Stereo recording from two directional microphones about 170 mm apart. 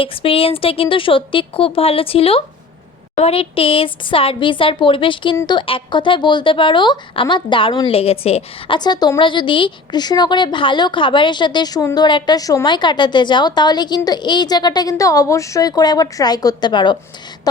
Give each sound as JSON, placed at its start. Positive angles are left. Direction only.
{"t": 0.0, "sound": "a woman's voice", "side_deg": 30}